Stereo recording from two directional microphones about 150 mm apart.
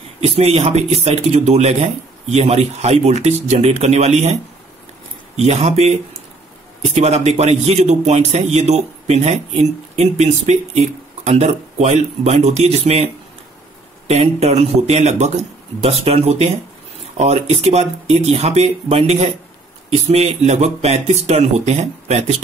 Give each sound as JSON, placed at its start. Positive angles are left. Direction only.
{"t": 0.2, "sound": "a man's voice", "side_deg": -45}